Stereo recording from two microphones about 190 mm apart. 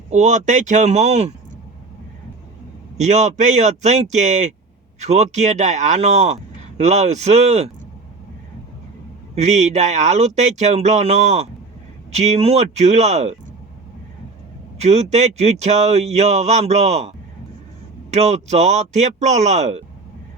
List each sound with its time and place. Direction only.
0.1 s speech: 40° right (ahead or behind)
3.0 s speech: 35° right (ahead or behind)
9.3 s speech: 35° right (ahead or behind)
14.8 s speech: 35° right (ahead or behind)